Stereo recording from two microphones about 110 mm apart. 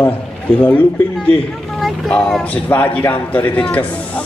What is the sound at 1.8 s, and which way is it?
Speech, centre (ahead or behind).